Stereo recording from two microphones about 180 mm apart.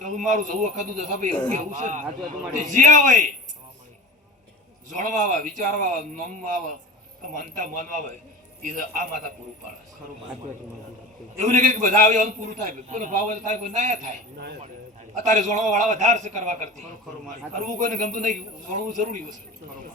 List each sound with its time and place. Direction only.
0.0 s a man's voice: 45° right (ahead or behind)
4.9 s a man's voice: 45° right (ahead or behind)
11.4 s a man's voice: 45° right (ahead or behind)
14.3 s speech: 65° right (ahead or behind)
15.1 s a man's voice: 45° right (ahead or behind)